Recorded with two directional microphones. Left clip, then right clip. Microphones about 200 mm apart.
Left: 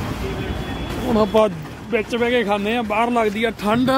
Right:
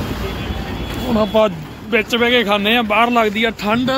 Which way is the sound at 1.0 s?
20° left (ahead or behind).